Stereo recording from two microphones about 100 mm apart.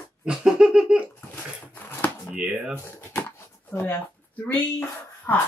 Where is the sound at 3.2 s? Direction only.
20° left (ahead or behind).